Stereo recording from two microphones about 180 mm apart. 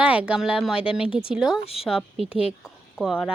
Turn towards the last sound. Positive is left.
turn(degrees=0)  # may be behind; listen again after turning